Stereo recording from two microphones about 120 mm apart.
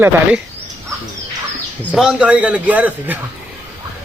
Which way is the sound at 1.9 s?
5° right (ahead or behind).